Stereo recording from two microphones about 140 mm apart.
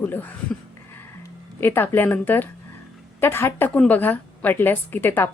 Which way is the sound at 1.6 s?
15° left (ahead or behind).